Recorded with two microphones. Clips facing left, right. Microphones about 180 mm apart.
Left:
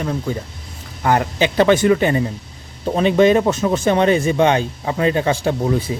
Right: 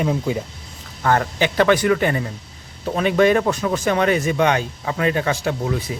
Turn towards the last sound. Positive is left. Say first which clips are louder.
# left 4 dB
turn(degrees=30)  # may be behind; listen again after turning